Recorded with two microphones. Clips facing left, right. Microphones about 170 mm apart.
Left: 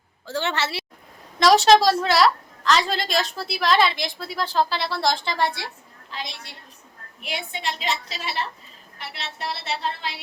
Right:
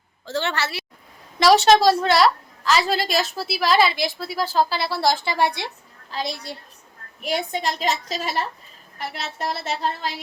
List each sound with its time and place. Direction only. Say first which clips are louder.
0.3 s a woman's voice: right 1 dB; 10° left (ahead or behind)
0.5 s a woman's voice: even; 25° left (ahead or behind)
1.4 s a woman's voice: right 1 dB; centre (ahead or behind); by 5.7 s 20° right (ahead or behind)
6.1 s a woman's voice: right 7 dB; 40° right (ahead or behind)